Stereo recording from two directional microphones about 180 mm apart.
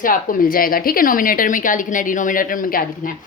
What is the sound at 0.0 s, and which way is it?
A woman's voice, 50° left (ahead or behind).